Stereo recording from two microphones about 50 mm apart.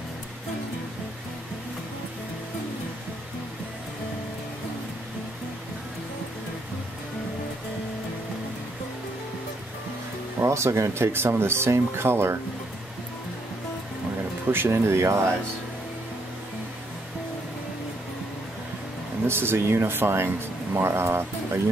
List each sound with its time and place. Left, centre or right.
10.4 s speech: right
11.1 s speech: right
14.5 s speech: right
19.2 s speech: right